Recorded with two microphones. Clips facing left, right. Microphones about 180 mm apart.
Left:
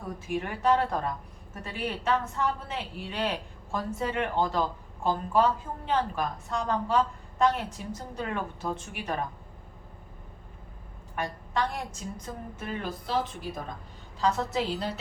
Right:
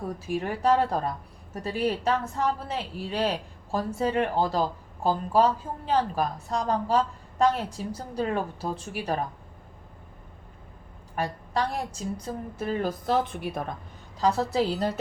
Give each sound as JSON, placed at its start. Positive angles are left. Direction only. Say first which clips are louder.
{"t": 0.3, "sound": "a woman's voice", "louder": "right 2 dB", "side_deg": -35}
{"t": 11.1, "sound": "a woman's voice", "louder": "right 3 dB", "side_deg": -35}
{"t": 13.2, "sound": "speech", "louder": "right 5 dB", "side_deg": -60}
{"t": 14.2, "sound": "a woman's voice", "louder": "right 3 dB", "side_deg": -35}